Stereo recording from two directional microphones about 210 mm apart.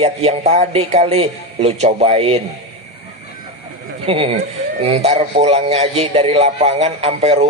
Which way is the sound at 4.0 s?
30° right (ahead or behind).